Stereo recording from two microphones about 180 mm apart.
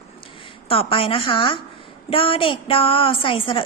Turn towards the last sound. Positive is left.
turn(degrees=30)  # may be behind; listen again after turning